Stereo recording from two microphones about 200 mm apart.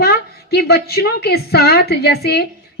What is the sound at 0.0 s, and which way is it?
A woman's voice, 50° left (ahead or behind).